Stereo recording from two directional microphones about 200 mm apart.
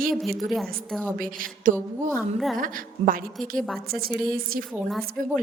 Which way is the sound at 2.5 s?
45° right (ahead or behind).